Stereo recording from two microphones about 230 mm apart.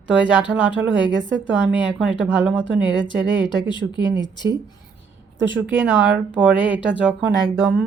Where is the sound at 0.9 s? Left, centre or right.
Right.